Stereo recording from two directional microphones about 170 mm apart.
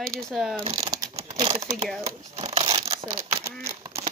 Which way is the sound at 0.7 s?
20° right (ahead or behind).